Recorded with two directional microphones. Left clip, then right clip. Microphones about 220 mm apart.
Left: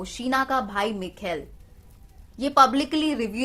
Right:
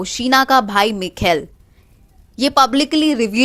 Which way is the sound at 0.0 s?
35° right (ahead or behind).